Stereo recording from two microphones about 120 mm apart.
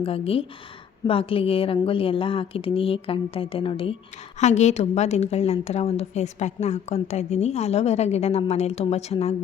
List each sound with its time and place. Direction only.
0.0 s a woman's voice: 55° left (ahead or behind)
4.4 s a woman's voice: 75° left (ahead or behind)